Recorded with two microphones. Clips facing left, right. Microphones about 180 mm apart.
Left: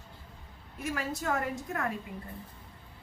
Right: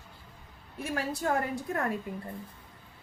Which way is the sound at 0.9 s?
35° right (ahead or behind).